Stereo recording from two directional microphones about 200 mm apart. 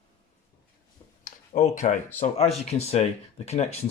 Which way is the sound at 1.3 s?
40° left (ahead or behind).